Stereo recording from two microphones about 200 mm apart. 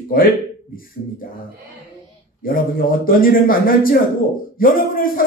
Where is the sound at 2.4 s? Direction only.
45° left (ahead or behind).